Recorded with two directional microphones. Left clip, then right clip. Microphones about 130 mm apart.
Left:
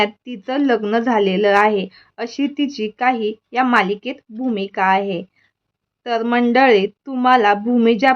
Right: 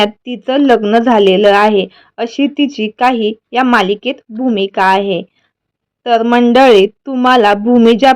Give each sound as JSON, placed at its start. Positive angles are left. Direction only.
{"t": 0.0, "sound": "a woman's voice", "side_deg": -35}